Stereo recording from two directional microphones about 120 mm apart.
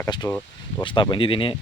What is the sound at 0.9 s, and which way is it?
Speech, 40° left (ahead or behind).